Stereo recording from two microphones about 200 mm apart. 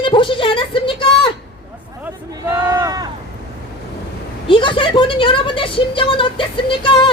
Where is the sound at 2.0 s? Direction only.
15° right (ahead or behind).